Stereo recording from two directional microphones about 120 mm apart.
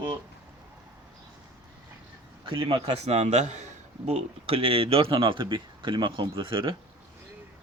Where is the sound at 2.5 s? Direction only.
45° right (ahead or behind).